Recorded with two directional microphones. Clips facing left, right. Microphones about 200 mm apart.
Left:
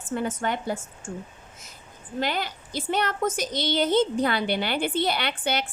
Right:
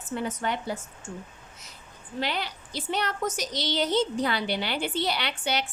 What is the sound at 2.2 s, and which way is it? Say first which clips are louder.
A woman's voice: left 3 dB; 45° left (ahead or behind).